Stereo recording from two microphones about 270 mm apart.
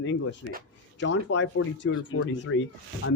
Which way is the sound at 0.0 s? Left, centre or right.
Left.